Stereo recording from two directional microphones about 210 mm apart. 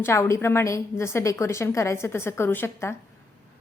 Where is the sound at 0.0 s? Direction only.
15° left (ahead or behind).